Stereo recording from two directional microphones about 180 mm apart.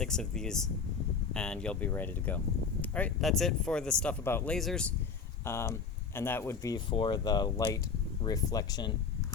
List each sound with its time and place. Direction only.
0.0 s speech: 5° left (ahead or behind)
5.5 s speech: 15° left (ahead or behind)